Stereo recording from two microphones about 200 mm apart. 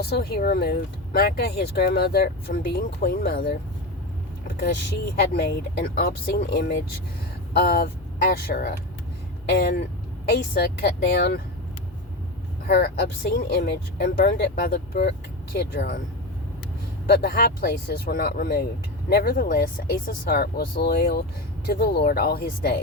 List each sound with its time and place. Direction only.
0.0 s speech: 55° left (ahead or behind)
4.6 s speech: 55° left (ahead or behind)
12.6 s speech: 50° left (ahead or behind)
17.1 s speech: 50° left (ahead or behind)